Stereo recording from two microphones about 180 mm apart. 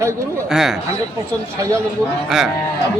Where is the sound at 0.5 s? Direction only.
Centre (ahead or behind).